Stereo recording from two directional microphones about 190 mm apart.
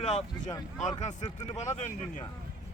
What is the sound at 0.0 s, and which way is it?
Speech, 35° left (ahead or behind).